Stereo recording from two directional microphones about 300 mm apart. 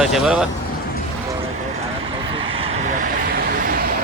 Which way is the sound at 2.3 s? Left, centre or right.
Centre.